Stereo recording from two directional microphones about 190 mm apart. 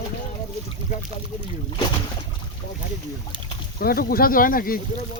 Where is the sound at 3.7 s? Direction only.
50° left (ahead or behind).